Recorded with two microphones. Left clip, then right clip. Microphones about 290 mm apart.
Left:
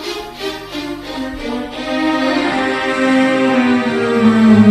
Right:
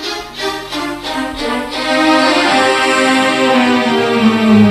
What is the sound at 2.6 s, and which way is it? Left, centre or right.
Music, right.